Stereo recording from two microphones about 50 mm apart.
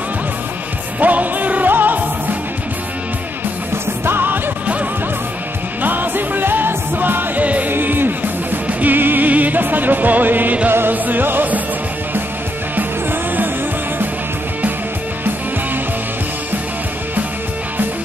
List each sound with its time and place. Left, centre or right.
0.9 s music: right
3.7 s music: right
5.8 s music: right
7.4 s music: right
7.7 s music: right
12.7 s music: right